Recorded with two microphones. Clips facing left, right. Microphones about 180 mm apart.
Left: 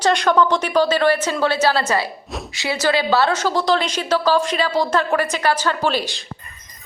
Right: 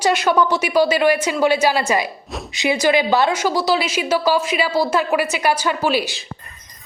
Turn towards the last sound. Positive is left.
turn(degrees=-10)  # may be behind; listen again after turning